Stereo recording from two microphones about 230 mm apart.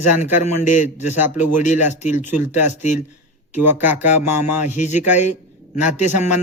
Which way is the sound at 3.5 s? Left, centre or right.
Centre.